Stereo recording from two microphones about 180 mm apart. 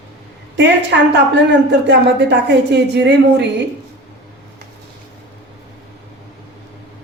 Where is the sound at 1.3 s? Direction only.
75° right (ahead or behind).